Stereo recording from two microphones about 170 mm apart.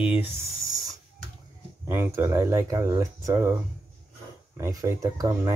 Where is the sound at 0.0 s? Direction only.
10° right (ahead or behind).